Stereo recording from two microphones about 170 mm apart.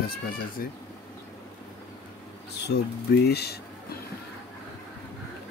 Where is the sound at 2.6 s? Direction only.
75° left (ahead or behind).